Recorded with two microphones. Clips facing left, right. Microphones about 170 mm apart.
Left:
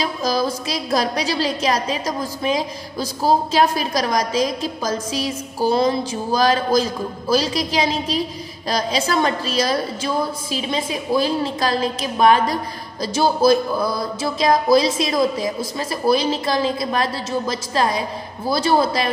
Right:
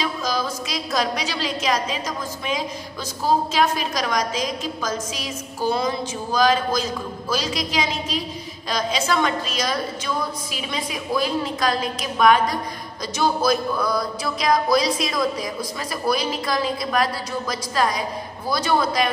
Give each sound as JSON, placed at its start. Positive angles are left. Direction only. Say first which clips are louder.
{"t": 0.0, "sound": "a woman's voice", "louder": "left 4 dB", "side_deg": 35}
{"t": 13.0, "sound": "music", "louder": "left 5 dB", "side_deg": 30}